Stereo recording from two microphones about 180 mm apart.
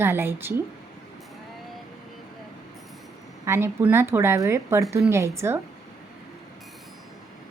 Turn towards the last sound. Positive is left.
turn(degrees=-15)  # may be behind; listen again after turning